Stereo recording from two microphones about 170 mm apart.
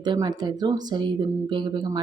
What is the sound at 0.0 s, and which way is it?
Speech, 25° right (ahead or behind).